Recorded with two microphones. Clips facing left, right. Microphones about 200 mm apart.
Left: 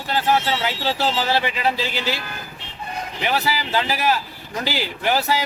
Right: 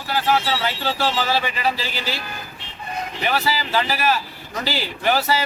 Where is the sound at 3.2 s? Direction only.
15° left (ahead or behind).